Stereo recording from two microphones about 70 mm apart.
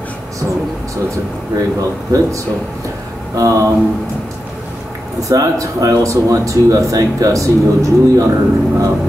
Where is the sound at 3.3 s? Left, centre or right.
Right.